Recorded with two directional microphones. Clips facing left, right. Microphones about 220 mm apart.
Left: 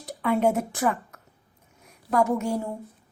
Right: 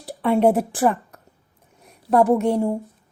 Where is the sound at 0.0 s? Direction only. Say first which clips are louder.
Right 4 dB; 30° right (ahead or behind).